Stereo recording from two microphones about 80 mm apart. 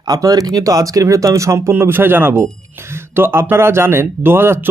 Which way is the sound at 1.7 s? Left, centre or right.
Right.